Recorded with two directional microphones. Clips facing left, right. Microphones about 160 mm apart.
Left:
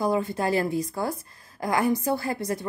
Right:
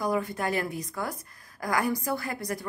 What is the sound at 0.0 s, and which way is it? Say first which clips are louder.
A woman's voice: left 4 dB; 25° left (ahead or behind).